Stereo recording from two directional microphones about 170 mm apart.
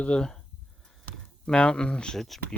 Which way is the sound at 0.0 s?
5° left (ahead or behind).